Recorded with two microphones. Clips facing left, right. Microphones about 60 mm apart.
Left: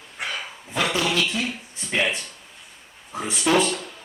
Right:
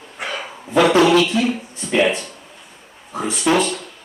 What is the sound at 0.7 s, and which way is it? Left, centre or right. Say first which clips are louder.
A man's voice: right 11 dB; right.